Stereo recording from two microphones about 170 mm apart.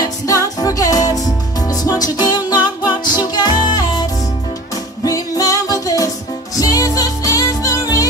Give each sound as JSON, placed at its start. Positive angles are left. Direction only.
{"t": 0.6, "sound": "music", "side_deg": 20}